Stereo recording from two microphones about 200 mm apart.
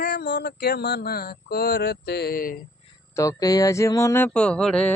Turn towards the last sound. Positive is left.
turn(degrees=5)  # may be behind; listen again after turning